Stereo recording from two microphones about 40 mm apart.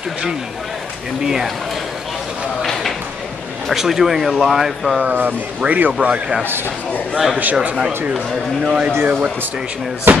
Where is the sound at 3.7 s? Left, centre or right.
Centre.